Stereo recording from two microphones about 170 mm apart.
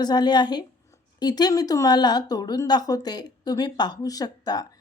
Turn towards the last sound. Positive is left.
turn(degrees=25)  # may be behind; listen again after turning